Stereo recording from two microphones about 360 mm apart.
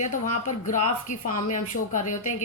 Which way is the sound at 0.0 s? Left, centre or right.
Left.